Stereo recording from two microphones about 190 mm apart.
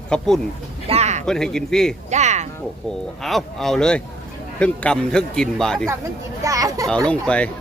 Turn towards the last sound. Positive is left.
turn(degrees=5)  # may be behind; listen again after turning